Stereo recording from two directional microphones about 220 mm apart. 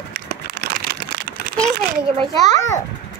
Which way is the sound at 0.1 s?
45° right (ahead or behind).